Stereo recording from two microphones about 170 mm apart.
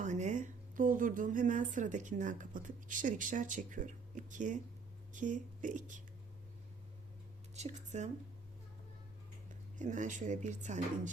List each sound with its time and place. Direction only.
0.0 s speech: 45° right (ahead or behind)
7.5 s speech: 40° right (ahead or behind)
9.7 s speech: 45° right (ahead or behind)